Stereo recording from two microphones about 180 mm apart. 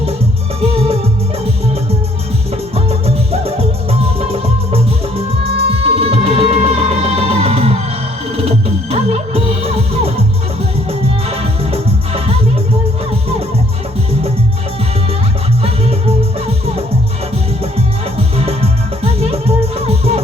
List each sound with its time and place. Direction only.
0.6 s music: 30° right (ahead or behind)
2.7 s music: 35° right (ahead or behind)
5.8 s music: 30° right (ahead or behind)
15.6 s music: 35° right (ahead or behind)
18.2 s music: 35° right (ahead or behind)